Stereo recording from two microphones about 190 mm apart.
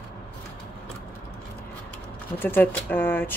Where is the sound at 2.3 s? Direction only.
10° left (ahead or behind).